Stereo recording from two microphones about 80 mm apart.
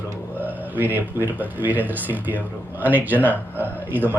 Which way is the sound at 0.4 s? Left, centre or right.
Right.